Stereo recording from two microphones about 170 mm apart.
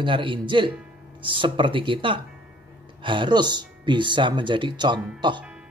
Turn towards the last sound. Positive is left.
turn(degrees=-25)  # may be behind; listen again after turning